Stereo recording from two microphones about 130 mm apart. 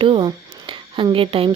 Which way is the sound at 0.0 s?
40° right (ahead or behind).